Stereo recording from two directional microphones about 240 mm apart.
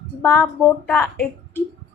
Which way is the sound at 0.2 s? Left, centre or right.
Centre.